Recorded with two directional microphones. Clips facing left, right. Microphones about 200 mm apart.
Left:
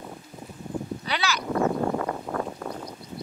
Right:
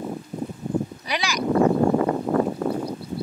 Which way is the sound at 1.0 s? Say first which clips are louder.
Right 1 dB; 15° right (ahead or behind).